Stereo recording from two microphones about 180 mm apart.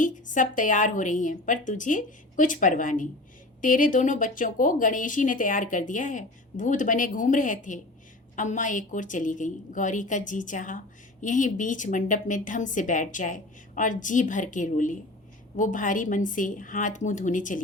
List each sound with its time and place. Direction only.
0.0 s speech: 45° left (ahead or behind)